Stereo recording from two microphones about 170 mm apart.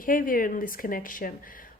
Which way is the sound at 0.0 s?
55° left (ahead or behind).